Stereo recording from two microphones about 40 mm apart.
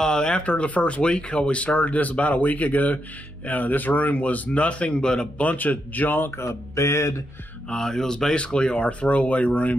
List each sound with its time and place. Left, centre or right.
0.0 s a sound: centre
0.3 s speech: left
5.4 s speech: left
7.7 s speech: centre; by 9.8 s left